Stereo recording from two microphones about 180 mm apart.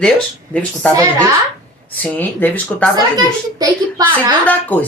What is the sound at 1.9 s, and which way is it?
Speech, 10° left (ahead or behind).